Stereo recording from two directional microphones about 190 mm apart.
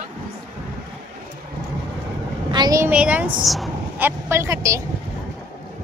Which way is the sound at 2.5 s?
20° right (ahead or behind).